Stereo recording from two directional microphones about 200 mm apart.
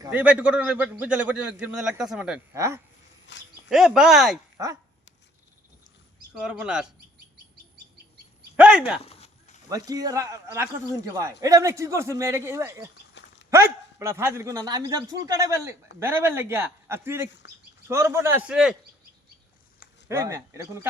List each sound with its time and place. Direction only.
0.0 s a man's voice: 5° right (ahead or behind)
3.3 s speech: 60° left (ahead or behind)
3.7 s a man's voice: centre (ahead or behind)
4.5 s speech: 15° right (ahead or behind)
6.4 s a man's voice: 5° right (ahead or behind)
8.5 s speech: 5° right (ahead or behind)
9.0 s a sound: 30° left (ahead or behind)
9.6 s a man's voice: 20° right (ahead or behind)
13.2 s a sound: 60° left (ahead or behind)
13.5 s a man's voice: 15° right (ahead or behind)
20.1 s a man's voice: 15° right (ahead or behind)